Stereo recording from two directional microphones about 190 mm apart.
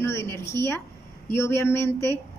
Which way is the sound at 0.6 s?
15° left (ahead or behind).